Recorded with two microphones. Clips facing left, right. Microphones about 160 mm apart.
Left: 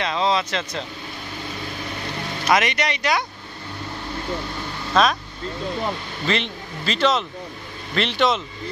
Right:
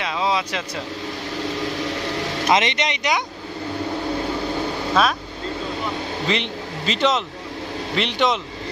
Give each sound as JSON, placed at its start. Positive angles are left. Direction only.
{"t": 0.0, "sound": "speech", "side_deg": -10}
{"t": 1.6, "sound": "a sound", "side_deg": -90}
{"t": 2.5, "sound": "speech", "side_deg": -25}
{"t": 5.0, "sound": "speech", "side_deg": -5}
{"t": 6.2, "sound": "speech", "side_deg": -15}